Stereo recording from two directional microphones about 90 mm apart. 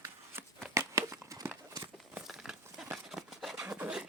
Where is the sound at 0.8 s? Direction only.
35° right (ahead or behind).